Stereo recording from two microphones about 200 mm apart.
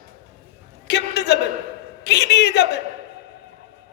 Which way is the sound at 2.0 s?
55° left (ahead or behind).